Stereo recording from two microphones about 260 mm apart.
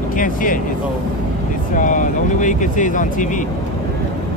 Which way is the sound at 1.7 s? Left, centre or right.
Left.